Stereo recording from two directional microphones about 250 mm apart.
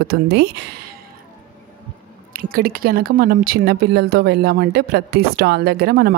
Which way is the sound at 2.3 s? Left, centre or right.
Right.